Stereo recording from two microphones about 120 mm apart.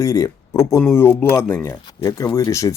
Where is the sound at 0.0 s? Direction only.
30° left (ahead or behind).